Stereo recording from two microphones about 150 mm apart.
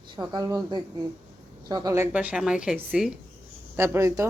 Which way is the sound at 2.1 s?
10° right (ahead or behind).